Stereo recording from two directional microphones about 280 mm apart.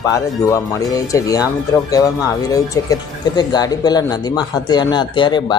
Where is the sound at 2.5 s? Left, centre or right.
Centre.